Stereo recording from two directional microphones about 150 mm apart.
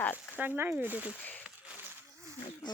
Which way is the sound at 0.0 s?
15° left (ahead or behind).